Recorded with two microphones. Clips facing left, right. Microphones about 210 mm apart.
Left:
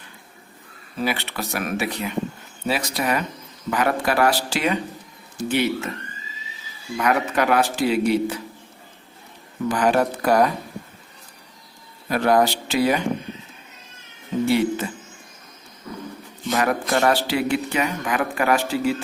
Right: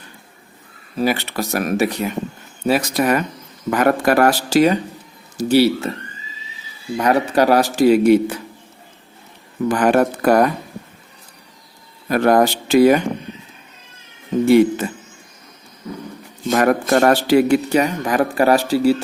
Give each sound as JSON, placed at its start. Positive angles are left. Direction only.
{"t": 0.9, "sound": "a man's voice", "side_deg": -40}
{"t": 6.9, "sound": "a man's voice", "side_deg": -35}
{"t": 9.6, "sound": "speech", "side_deg": -55}
{"t": 12.0, "sound": "speech", "side_deg": -50}
{"t": 14.4, "sound": "speech", "side_deg": -50}
{"t": 16.5, "sound": "a man's voice", "side_deg": -50}